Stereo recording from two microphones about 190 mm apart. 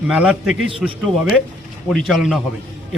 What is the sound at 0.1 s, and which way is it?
Speech, 5° right (ahead or behind).